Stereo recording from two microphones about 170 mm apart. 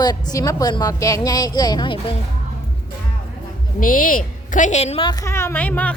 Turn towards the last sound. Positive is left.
turn(degrees=10)  # may be behind; listen again after turning